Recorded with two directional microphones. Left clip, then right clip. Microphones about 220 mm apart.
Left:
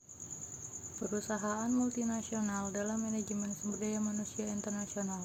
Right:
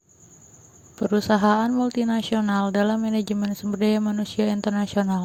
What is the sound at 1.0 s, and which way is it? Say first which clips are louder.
Speech: right 17 dB; 40° right (ahead or behind).